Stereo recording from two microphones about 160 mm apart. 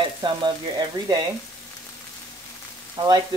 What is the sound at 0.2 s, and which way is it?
Frying, 25° right (ahead or behind).